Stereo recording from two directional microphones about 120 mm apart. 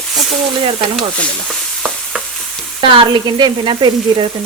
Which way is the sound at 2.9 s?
40° right (ahead or behind).